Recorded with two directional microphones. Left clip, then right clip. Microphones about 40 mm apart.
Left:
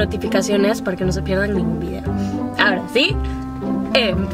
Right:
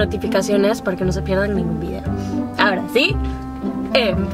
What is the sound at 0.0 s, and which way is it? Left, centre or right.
Speech, centre.